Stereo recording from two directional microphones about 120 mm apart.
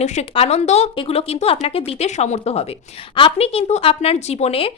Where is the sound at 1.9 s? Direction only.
70° left (ahead or behind).